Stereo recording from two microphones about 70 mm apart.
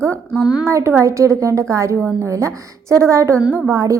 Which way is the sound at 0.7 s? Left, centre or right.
Right.